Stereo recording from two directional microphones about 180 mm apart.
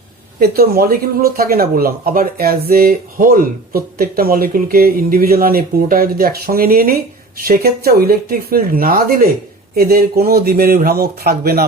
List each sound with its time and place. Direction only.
0.3 s speech: 60° right (ahead or behind)